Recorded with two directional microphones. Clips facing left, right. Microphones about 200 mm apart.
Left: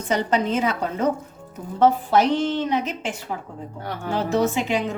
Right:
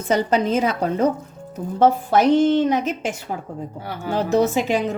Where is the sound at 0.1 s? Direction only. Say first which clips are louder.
Right 3 dB; 40° right (ahead or behind).